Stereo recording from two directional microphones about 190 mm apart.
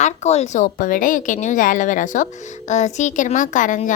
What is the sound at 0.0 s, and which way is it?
A woman's voice, 35° left (ahead or behind).